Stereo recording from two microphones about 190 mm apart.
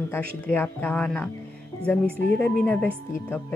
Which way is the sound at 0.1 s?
10° left (ahead or behind).